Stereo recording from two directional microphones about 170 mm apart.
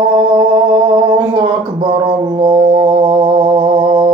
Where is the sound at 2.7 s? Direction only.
30° right (ahead or behind).